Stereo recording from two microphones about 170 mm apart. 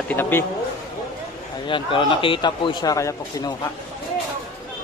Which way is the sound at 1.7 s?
30° left (ahead or behind).